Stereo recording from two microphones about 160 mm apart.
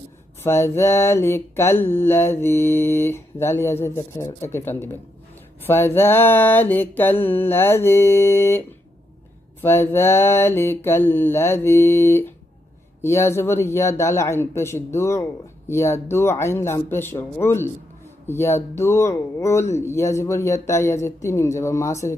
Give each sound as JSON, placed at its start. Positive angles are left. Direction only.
{"t": 0.4, "sound": "speech", "side_deg": 15}